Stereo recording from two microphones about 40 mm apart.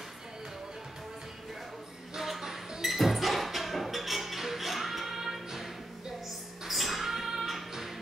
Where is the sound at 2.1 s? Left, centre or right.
Centre.